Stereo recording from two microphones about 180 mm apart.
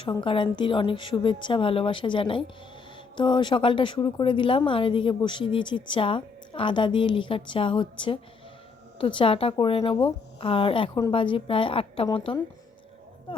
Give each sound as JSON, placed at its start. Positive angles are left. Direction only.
{"t": 0.0, "sound": "speech", "side_deg": 25}